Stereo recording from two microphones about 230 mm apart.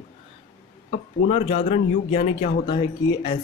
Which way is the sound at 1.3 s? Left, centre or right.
Left.